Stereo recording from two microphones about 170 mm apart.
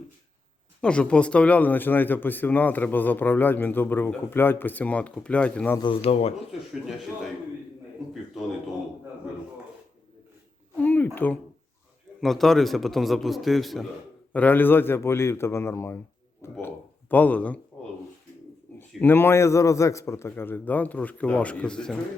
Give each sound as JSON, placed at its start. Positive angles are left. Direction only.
{"t": 0.8, "sound": "speech", "side_deg": 5}
{"t": 5.8, "sound": "speech", "side_deg": 35}
{"t": 8.4, "sound": "a man's voice", "side_deg": 0}
{"t": 10.8, "sound": "a sound", "side_deg": 10}
{"t": 12.2, "sound": "a man's voice", "side_deg": 0}
{"t": 18.8, "sound": "speech", "side_deg": 10}